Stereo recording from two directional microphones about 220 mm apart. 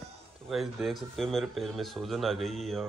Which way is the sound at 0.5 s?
Centre (ahead or behind).